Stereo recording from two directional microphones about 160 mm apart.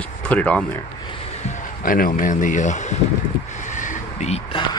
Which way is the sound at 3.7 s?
50° left (ahead or behind).